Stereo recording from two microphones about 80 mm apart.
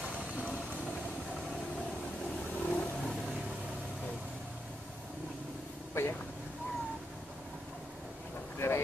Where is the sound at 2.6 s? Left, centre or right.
Centre.